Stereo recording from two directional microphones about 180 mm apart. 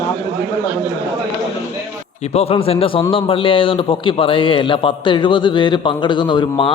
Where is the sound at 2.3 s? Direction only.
35° left (ahead or behind).